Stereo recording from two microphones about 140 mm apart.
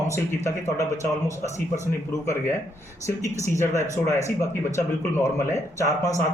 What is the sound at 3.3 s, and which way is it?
Speech, 20° left (ahead or behind).